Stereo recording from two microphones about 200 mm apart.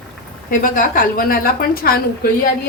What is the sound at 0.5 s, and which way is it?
A woman's voice, 45° left (ahead or behind).